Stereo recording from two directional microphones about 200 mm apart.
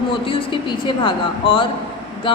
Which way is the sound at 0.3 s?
25° left (ahead or behind).